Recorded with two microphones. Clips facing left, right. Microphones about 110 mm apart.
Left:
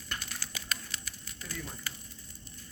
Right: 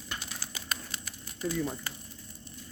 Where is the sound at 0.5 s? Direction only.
25° right (ahead or behind).